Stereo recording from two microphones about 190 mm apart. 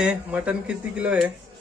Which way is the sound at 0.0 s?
5° right (ahead or behind).